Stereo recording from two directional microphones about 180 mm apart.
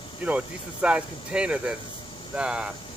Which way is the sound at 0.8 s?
5° right (ahead or behind).